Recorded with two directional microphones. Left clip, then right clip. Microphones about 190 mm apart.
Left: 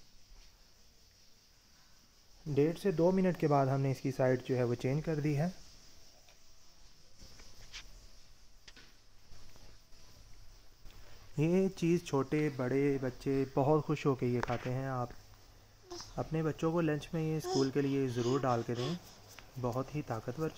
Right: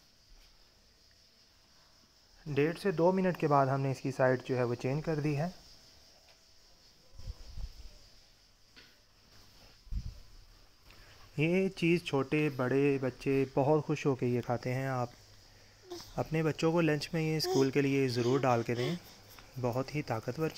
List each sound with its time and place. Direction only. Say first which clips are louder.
2.5 s speech: even; 10° left (ahead or behind)
11.3 s speech: right 1 dB; centre (ahead or behind)
14.5 s speech: right 3 dB; 10° right (ahead or behind)
16.2 s speech: right 4 dB; 10° right (ahead or behind)